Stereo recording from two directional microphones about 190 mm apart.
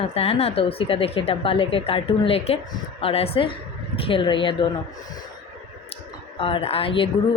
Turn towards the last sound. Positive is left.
turn(degrees=30)  # may be behind; listen again after turning